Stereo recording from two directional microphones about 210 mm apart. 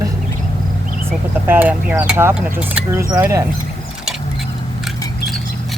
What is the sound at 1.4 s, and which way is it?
Speech, 10° right (ahead or behind).